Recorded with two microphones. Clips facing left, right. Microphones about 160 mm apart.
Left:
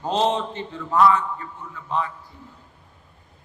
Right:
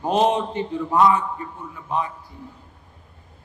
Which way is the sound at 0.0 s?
15° right (ahead or behind).